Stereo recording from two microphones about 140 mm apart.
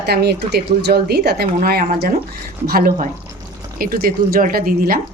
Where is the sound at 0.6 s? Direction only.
90° right.